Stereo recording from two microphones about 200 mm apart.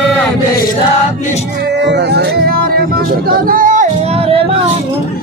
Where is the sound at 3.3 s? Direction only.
45° right (ahead or behind).